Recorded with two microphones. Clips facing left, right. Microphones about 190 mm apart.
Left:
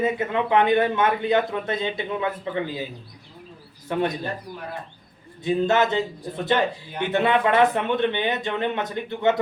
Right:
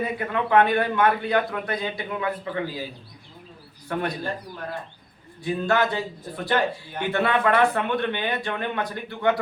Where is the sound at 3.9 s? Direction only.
20° left (ahead or behind).